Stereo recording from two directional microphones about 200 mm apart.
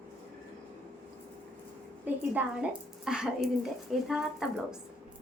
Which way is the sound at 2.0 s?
5° right (ahead or behind).